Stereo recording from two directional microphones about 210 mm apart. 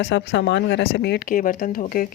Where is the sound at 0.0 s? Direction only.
55° left (ahead or behind).